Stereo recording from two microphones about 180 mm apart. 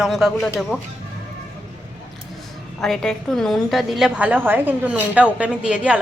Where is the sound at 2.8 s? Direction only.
Centre (ahead or behind).